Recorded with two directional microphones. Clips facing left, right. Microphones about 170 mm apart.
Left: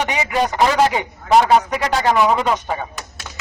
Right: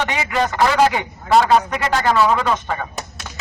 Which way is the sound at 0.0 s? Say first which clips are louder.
Left 1 dB; 15° left (ahead or behind).